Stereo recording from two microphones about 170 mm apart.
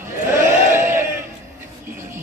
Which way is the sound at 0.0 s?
15° right (ahead or behind).